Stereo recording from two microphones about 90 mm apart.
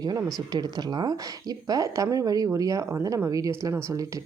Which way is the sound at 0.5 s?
45° right (ahead or behind).